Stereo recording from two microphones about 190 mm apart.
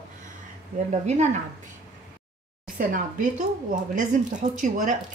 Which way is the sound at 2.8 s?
45° right (ahead or behind).